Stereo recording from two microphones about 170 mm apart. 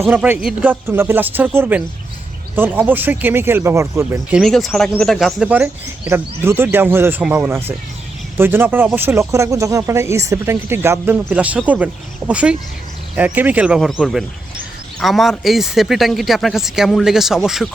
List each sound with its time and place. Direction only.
0.1 s speech: 10° right (ahead or behind)